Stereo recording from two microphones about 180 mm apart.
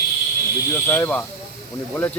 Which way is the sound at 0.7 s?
15° left (ahead or behind).